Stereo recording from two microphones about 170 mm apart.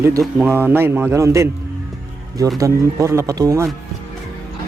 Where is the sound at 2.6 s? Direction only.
15° right (ahead or behind).